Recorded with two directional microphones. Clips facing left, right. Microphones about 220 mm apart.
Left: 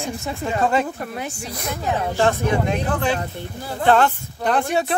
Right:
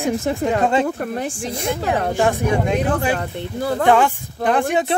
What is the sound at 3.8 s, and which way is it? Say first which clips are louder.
Speech: left 1 dB; 10° right (ahead or behind).